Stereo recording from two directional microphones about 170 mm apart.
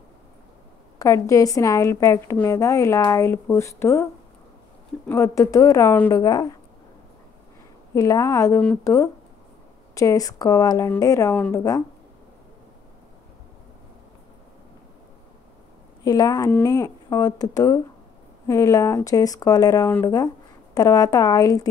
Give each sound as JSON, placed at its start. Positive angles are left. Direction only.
{"t": 0.9, "sound": "a woman's voice", "side_deg": 20}
{"t": 7.9, "sound": "a woman's voice", "side_deg": 20}
{"t": 16.0, "sound": "speech", "side_deg": 20}